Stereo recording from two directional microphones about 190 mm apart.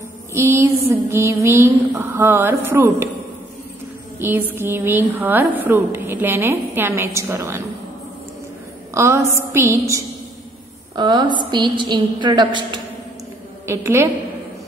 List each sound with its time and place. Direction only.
0.3 s a sound: 15° right (ahead or behind)
1.1 s a woman's voice: 10° right (ahead or behind)
4.2 s a woman's voice: 10° right (ahead or behind)
8.9 s a woman's voice: 15° right (ahead or behind)
13.7 s a woman's voice: 15° right (ahead or behind)